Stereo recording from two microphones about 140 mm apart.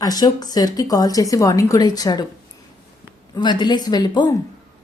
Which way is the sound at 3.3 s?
30° left (ahead or behind).